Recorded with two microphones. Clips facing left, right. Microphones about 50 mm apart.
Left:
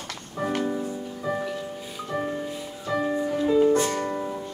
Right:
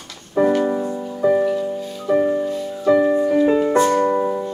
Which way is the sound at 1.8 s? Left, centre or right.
Centre.